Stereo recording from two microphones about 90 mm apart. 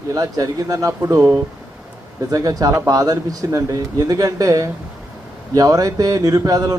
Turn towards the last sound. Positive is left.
turn(degrees=-40)  # may be behind; listen again after turning